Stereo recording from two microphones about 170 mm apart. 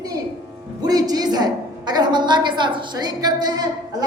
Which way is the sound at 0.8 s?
20° right (ahead or behind).